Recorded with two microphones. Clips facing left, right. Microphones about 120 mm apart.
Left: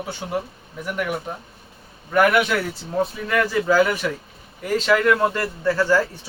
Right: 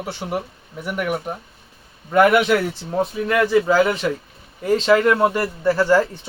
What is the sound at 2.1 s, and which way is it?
A man's voice, 25° right (ahead or behind).